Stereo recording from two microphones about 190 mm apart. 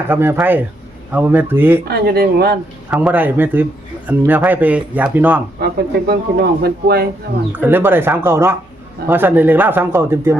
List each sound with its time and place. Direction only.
0.1 s speech: 10° right (ahead or behind)
1.8 s speech: 55° right (ahead or behind)
2.9 s speech: 5° right (ahead or behind)
5.5 s speech: 60° right (ahead or behind)
7.5 s speech: 10° right (ahead or behind)